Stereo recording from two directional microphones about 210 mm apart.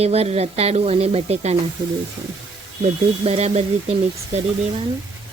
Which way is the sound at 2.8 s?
30° right (ahead or behind).